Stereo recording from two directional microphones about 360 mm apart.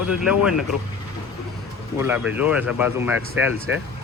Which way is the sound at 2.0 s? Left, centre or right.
Centre.